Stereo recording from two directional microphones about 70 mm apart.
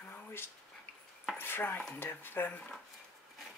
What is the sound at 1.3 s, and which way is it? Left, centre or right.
Chopping, left.